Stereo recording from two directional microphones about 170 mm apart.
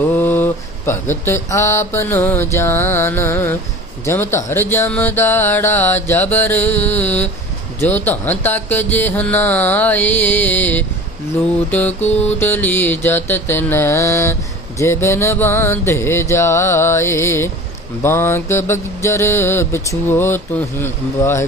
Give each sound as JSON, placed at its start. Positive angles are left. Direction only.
{"t": 0.1, "sound": "speech", "side_deg": 10}
{"t": 2.5, "sound": "mantra", "side_deg": 15}
{"t": 12.0, "sound": "music", "side_deg": 40}
{"t": 12.4, "sound": "mantra", "side_deg": 10}